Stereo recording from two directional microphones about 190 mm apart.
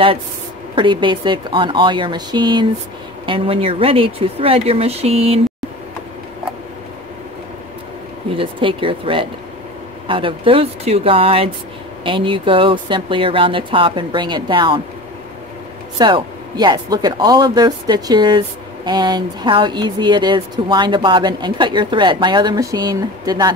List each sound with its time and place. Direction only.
0.7 s speech: 25° right (ahead or behind)
8.4 s speech: 30° right (ahead or behind)
16.0 s speech: 25° right (ahead or behind)